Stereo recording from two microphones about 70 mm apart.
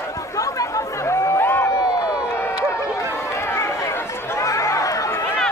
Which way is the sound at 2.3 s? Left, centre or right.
Left.